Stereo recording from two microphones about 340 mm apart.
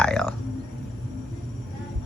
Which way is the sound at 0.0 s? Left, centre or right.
Centre.